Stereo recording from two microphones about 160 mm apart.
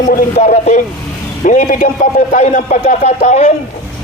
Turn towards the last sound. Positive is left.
turn(degrees=50)  # may be behind; listen again after turning